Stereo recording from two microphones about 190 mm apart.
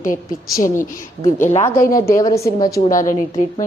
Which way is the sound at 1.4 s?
40° left (ahead or behind).